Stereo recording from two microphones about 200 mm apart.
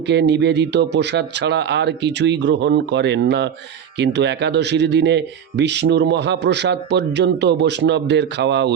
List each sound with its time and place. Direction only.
0.1 s a man's voice: 60° right (ahead or behind)